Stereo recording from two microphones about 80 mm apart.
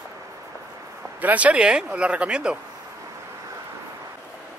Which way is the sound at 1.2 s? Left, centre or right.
Centre.